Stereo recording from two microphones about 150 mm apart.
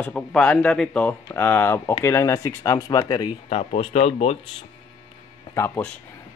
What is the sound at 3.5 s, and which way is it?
Speech, 45° left (ahead or behind).